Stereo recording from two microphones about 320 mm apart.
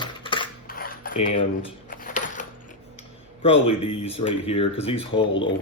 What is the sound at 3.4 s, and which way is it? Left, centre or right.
A man's voice, centre.